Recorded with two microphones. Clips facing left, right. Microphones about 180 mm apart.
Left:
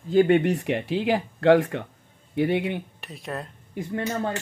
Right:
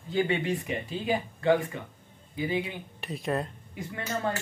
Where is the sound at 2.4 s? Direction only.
65° left (ahead or behind).